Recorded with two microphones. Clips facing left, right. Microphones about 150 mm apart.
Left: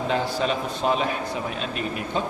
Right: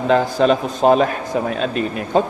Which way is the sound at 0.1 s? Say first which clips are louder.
Right 11 dB; 50° right (ahead or behind).